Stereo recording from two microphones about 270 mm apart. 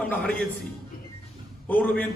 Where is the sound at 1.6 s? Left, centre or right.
Centre.